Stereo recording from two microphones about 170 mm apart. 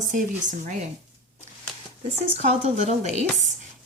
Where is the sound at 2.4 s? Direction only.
40° right (ahead or behind).